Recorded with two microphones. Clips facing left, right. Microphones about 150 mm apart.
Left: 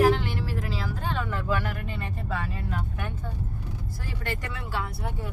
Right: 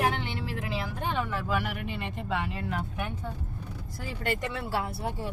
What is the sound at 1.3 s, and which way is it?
Speech, 5° right (ahead or behind).